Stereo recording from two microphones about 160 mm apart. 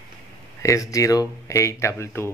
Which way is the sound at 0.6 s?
20° left (ahead or behind).